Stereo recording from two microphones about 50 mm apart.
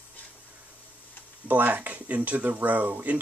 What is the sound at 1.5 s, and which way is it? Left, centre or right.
Speech, right.